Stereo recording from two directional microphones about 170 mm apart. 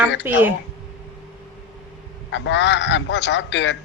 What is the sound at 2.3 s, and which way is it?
A man's voice, 90° left.